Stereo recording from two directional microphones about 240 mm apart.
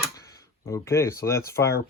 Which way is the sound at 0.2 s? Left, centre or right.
Centre.